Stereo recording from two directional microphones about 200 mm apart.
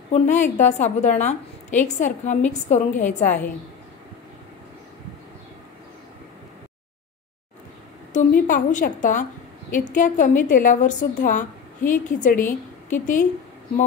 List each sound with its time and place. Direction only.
0.1 s a woman's voice: 35° left (ahead or behind)
8.1 s a woman's voice: 40° left (ahead or behind)